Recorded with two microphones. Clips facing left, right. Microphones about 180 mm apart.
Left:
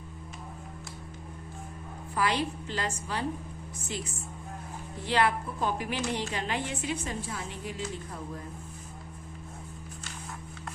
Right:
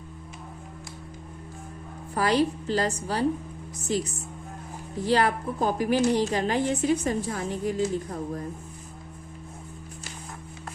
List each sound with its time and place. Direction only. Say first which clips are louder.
2.1 s a woman's voice: right 6 dB; 40° right (ahead or behind)